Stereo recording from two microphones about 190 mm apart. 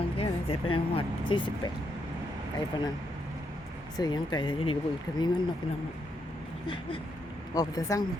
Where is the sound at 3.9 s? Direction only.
20° left (ahead or behind).